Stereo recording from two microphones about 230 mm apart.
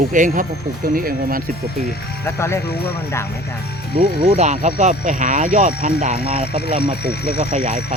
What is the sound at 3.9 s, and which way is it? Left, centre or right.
Speech, right.